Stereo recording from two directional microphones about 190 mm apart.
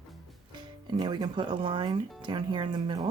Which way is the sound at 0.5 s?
25° right (ahead or behind).